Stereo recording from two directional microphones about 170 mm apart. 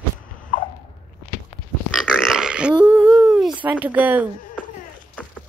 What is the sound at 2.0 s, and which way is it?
Burping, centre (ahead or behind).